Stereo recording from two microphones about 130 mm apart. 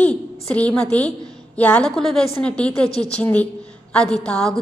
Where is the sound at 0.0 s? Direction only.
10° left (ahead or behind).